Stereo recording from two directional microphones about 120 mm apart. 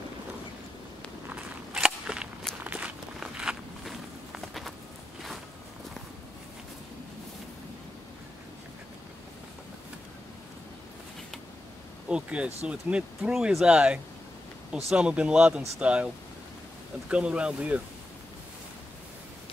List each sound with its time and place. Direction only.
1.3 s a sound: 5° right (ahead or behind)
2.6 s walk: 10° right (ahead or behind)
12.1 s speech: 10° right (ahead or behind)
17.1 s speech: 10° right (ahead or behind)